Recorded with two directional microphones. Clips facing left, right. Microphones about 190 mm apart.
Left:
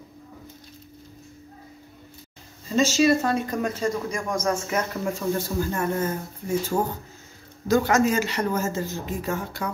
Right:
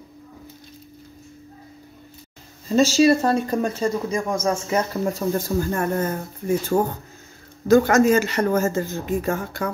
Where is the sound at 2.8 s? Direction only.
35° right (ahead or behind).